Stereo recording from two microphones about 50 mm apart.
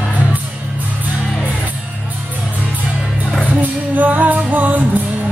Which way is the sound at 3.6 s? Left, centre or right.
Right.